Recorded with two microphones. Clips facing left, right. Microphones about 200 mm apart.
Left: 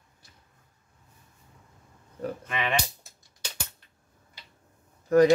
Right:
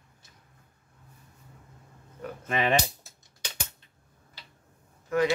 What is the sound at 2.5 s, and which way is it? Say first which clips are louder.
Speech: right 5 dB; 40° right (ahead or behind).